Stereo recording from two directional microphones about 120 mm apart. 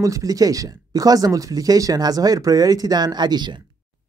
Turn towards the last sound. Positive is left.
turn(degrees=-40)  # may be behind; listen again after turning